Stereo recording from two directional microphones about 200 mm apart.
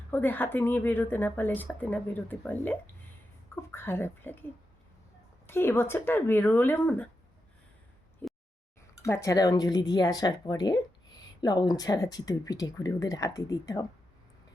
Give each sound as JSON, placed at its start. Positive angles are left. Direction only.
{"t": 0.1, "sound": "speech", "side_deg": 10}
{"t": 5.5, "sound": "speech", "side_deg": 10}
{"t": 9.0, "sound": "speech", "side_deg": 15}